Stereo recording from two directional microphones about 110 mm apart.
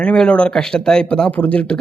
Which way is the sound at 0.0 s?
10° left (ahead or behind).